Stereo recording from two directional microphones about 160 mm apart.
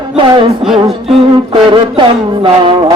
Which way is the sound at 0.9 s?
Centre (ahead or behind).